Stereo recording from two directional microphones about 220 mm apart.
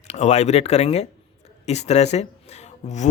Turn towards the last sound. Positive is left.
turn(degrees=30)  # may be behind; listen again after turning